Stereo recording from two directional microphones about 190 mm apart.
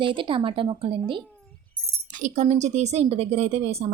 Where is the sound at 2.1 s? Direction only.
40° right (ahead or behind).